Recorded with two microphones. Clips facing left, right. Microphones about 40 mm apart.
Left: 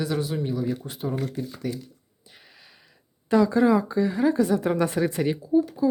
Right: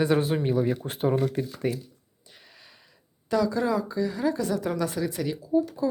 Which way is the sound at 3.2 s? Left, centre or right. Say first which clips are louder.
Left 5 dB; left.